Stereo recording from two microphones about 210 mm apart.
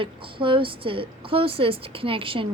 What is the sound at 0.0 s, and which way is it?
A woman's voice, 25° right (ahead or behind).